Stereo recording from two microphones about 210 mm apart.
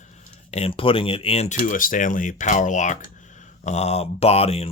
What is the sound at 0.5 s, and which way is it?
Speech, 30° left (ahead or behind).